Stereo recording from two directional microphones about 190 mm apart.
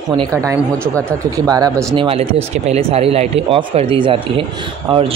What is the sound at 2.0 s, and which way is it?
Speech, 30° right (ahead or behind).